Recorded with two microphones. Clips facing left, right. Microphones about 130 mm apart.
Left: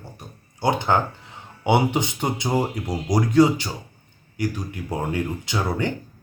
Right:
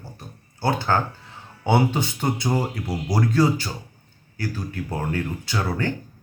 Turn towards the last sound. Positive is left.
turn(degrees=20)  # may be behind; listen again after turning